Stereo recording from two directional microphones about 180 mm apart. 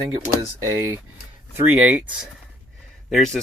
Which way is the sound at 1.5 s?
10° right (ahead or behind).